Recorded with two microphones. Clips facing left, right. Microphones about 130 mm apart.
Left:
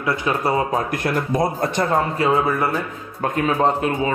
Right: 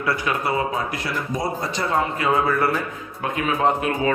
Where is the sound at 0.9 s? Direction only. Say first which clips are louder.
Left 6 dB; 50° left (ahead or behind).